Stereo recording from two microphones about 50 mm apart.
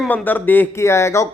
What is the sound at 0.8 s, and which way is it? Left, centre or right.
Speech, left.